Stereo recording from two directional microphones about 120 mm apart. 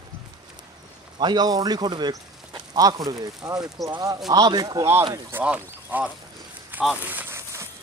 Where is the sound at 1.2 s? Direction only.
35° right (ahead or behind).